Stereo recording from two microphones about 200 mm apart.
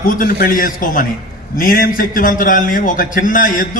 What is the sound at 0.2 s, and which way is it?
A man's voice, 45° left (ahead or behind).